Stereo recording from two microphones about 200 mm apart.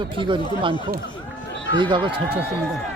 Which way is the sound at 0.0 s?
25° right (ahead or behind).